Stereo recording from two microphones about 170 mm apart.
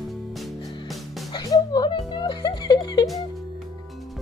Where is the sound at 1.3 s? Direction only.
25° left (ahead or behind).